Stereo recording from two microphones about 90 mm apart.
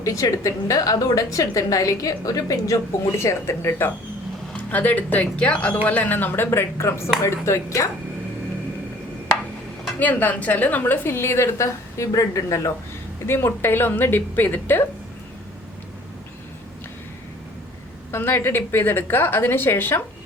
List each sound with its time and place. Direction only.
0.0 s a woman's voice: 40° left (ahead or behind)
10.0 s a woman's voice: 20° left (ahead or behind); by 12.7 s 35° left (ahead or behind)
13.2 s a woman's voice: 25° left (ahead or behind)
18.1 s a woman's voice: 25° left (ahead or behind)